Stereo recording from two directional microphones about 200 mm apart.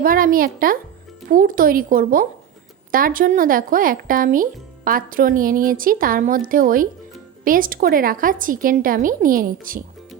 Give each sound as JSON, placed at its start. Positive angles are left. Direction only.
{"t": 0.0, "sound": "speech", "side_deg": -45}